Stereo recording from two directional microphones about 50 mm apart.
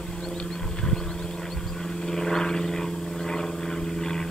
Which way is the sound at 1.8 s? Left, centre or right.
Centre.